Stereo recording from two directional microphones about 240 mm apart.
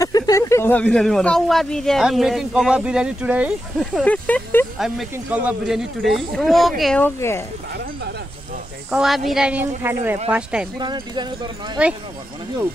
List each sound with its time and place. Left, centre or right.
0.0 s speech: centre
4.0 s speech: centre
8.9 s speech: centre
10.8 s speech: centre